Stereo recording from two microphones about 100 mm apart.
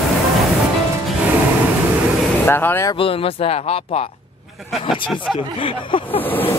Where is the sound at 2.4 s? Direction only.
20° left (ahead or behind).